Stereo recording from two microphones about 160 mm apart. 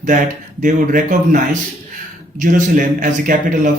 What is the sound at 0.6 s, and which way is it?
Speech, 55° right (ahead or behind).